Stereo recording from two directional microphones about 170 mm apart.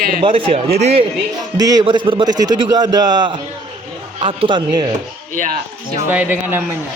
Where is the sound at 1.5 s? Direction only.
20° right (ahead or behind).